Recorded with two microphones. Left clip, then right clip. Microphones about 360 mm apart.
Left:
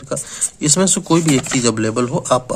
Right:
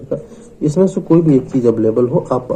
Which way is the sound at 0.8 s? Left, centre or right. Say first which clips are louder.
Right 5 dB; left.